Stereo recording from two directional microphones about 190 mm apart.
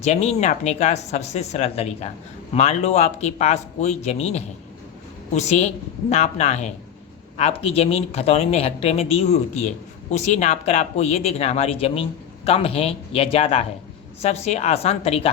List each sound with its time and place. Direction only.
0.0 s speech: 35° left (ahead or behind)